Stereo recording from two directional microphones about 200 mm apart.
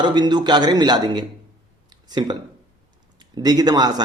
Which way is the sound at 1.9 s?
20° right (ahead or behind).